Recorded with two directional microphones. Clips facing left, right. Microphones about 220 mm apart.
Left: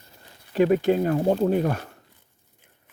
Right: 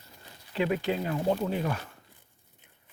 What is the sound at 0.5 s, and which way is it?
Speech, 45° left (ahead or behind).